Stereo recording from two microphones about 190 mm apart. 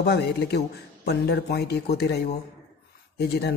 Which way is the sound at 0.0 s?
60° left (ahead or behind).